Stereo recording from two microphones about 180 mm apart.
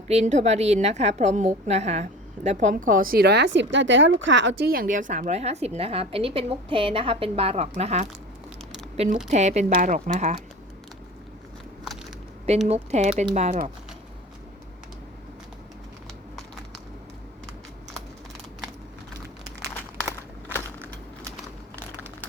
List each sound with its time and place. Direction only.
0.1 s a woman's voice: 40° right (ahead or behind)
9.3 s a woman's voice: 40° right (ahead or behind)
12.6 s a woman's voice: 35° right (ahead or behind)
20.6 s a sound: 10° left (ahead or behind)